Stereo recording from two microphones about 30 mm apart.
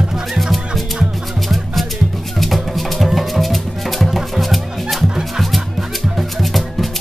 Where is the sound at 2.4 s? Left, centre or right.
Centre.